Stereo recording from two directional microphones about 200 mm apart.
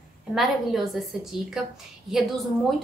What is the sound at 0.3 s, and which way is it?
Speech, centre (ahead or behind).